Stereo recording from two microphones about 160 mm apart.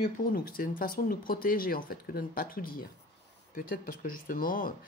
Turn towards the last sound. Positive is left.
turn(degrees=60)  # may be behind; listen again after turning